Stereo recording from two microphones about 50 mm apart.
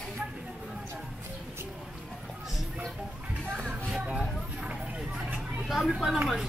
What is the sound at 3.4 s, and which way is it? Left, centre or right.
Music, centre.